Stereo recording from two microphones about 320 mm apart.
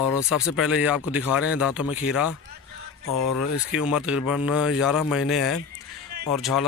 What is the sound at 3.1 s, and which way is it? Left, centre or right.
Speech, left.